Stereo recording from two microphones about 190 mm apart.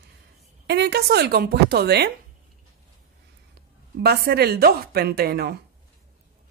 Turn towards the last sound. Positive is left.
turn(degrees=-55)  # may be behind; listen again after turning